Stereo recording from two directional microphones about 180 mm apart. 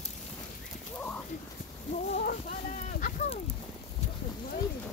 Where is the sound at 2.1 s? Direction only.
55° left (ahead or behind).